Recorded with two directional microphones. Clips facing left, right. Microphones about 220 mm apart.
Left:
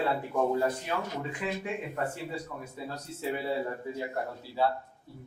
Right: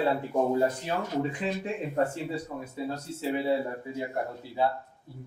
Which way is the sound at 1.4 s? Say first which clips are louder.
Right 2 dB; 25° right (ahead or behind).